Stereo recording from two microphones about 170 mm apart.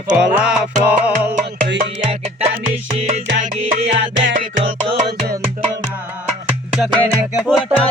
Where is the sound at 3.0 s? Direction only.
40° right (ahead or behind).